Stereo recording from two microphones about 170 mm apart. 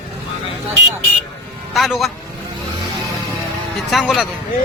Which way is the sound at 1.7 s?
Centre (ahead or behind).